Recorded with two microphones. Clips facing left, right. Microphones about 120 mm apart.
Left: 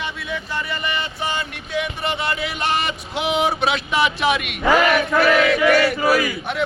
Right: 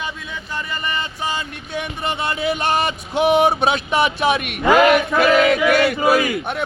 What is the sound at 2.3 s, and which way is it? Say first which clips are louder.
Battle cry: right 5 dB; 25° right (ahead or behind).